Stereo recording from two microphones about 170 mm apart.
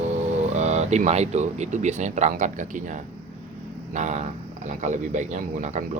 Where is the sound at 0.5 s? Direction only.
40° right (ahead or behind).